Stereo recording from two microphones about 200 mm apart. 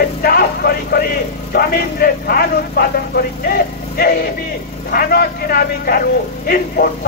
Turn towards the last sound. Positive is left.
turn(degrees=50)  # may be behind; listen again after turning